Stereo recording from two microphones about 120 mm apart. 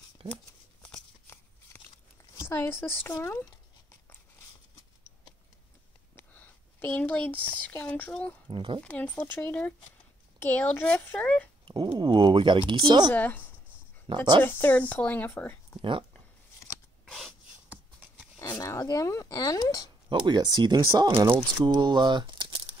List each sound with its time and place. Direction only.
1.2 s a sound: 20° left (ahead or behind)
2.3 s speech: 20° left (ahead or behind)
6.1 s speech: 15° left (ahead or behind)
8.5 s speech: 45° right (ahead or behind)
8.8 s speech: 10° left (ahead or behind)
11.6 s a sound: 40° right (ahead or behind)
12.0 s speech: 40° right (ahead or behind)
13.1 s speech: 15° left (ahead or behind)
14.0 s speech: 40° right (ahead or behind)
14.4 s speech: 15° left (ahead or behind)
15.8 s speech: 45° right (ahead or behind)
17.0 s a sound: centre (ahead or behind)
18.4 s speech: 25° left (ahead or behind)
20.1 s speech: 40° right (ahead or behind)